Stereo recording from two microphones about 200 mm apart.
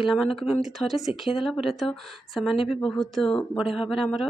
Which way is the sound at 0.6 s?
Centre (ahead or behind).